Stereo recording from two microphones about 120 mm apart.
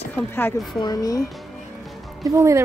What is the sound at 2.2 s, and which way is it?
Speech, 25° right (ahead or behind).